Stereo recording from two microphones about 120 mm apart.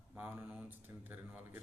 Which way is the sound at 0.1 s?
10° right (ahead or behind).